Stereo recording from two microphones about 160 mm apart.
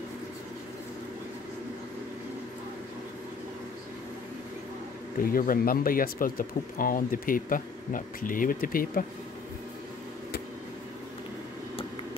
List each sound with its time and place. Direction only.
5.2 s speech: 65° left (ahead or behind)